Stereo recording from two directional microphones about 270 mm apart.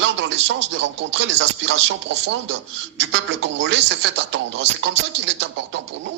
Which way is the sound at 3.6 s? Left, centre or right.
Right.